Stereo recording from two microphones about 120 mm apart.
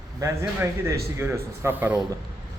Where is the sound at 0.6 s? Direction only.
20° right (ahead or behind).